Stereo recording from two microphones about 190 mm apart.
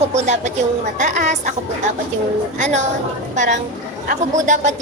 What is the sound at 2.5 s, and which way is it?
A woman's voice, 40° right (ahead or behind).